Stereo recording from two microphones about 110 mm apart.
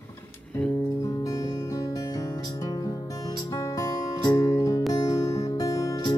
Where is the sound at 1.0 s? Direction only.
30° left (ahead or behind).